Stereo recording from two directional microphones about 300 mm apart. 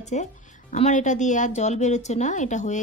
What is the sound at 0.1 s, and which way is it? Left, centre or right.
A woman's voice, left.